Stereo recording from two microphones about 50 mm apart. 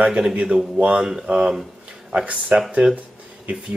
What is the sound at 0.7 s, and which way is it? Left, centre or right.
Speech, right.